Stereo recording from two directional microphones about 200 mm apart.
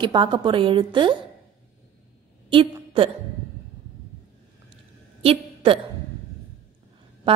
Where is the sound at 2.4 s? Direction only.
25° right (ahead or behind).